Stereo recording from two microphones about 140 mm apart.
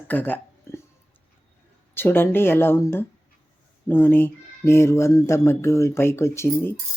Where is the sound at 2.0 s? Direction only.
15° left (ahead or behind).